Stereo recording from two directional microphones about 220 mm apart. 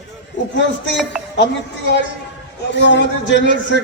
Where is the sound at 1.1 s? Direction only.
5° right (ahead or behind).